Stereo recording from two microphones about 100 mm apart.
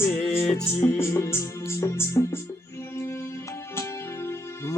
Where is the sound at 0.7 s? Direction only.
25° left (ahead or behind).